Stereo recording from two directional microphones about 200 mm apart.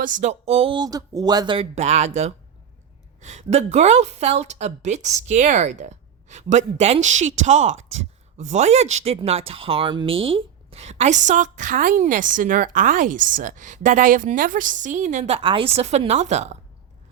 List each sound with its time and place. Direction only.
0.0 s speech: 40° right (ahead or behind)